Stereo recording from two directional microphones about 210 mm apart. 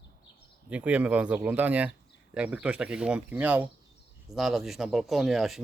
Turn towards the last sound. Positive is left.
turn(degrees=0)  # may be behind; listen again after turning